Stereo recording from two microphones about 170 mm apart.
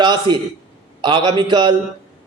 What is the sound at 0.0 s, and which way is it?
A man's voice, 25° right (ahead or behind).